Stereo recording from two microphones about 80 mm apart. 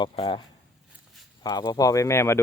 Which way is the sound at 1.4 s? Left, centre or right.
Left.